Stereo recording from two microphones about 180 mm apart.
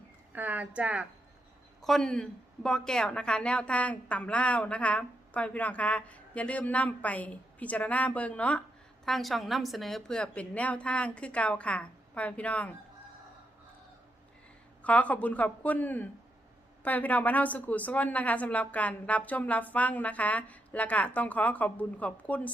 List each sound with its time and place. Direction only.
0.3 s a woman's voice: 10° right (ahead or behind); by 12.7 s 5° left (ahead or behind)
14.8 s a woman's voice: 5° left (ahead or behind)